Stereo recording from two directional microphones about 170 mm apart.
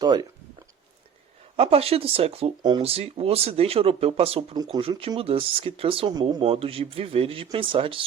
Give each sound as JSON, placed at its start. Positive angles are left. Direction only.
{"t": 0.0, "sound": "speech", "side_deg": -20}
{"t": 1.5, "sound": "speech", "side_deg": -35}
{"t": 2.6, "sound": "speech", "side_deg": -25}
{"t": 2.8, "sound": "speech", "side_deg": -35}